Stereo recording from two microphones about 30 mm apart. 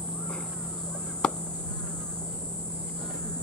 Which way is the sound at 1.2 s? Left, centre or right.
Left.